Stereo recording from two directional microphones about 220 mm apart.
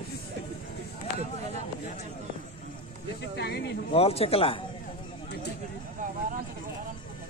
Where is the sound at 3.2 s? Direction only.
50° left (ahead or behind).